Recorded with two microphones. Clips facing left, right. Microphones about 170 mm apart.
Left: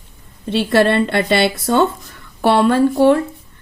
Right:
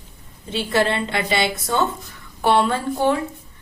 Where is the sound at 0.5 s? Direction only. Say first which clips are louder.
Left 6 dB; 65° left (ahead or behind).